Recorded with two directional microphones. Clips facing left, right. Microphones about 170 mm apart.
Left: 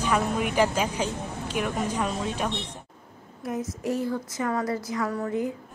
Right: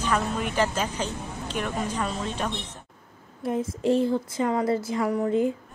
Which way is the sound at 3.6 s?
25° right (ahead or behind).